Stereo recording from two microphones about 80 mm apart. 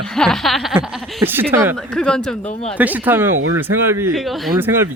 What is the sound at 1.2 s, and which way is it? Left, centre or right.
Speech, right.